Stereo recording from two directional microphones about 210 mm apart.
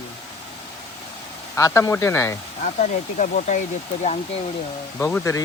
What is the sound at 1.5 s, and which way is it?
Speech, 15° left (ahead or behind).